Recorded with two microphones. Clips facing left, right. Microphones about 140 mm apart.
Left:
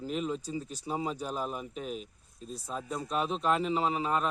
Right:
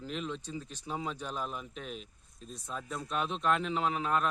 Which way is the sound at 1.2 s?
40° left (ahead or behind).